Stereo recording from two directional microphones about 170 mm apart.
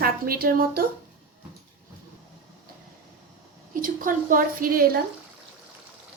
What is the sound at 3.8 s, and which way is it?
A woman's voice, 50° right (ahead or behind).